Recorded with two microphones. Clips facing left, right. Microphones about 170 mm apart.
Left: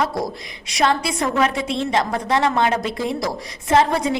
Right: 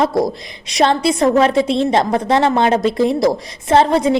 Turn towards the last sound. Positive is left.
turn(degrees=-30)  # may be behind; listen again after turning